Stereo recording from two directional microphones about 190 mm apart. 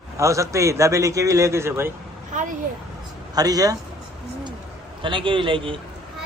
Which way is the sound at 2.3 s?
40° right (ahead or behind).